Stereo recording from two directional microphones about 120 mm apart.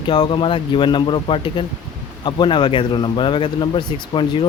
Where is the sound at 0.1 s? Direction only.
40° left (ahead or behind).